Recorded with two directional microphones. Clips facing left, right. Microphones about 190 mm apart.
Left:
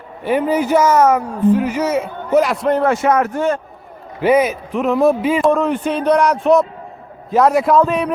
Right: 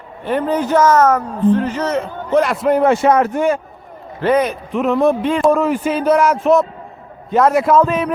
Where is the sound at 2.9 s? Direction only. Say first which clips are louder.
Right 2 dB; 30° right (ahead or behind).